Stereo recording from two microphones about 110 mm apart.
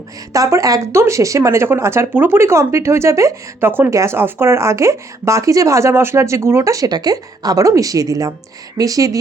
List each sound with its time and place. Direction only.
0.3 s speech: 30° right (ahead or behind)